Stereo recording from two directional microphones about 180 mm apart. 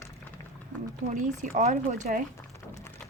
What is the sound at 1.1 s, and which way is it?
Speech, 40° right (ahead or behind).